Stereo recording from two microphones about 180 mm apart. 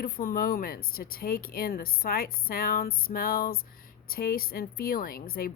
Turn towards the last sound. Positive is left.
turn(degrees=55)  # may be behind; listen again after turning